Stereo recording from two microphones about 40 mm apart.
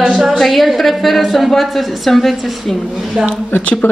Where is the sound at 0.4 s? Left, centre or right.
Centre.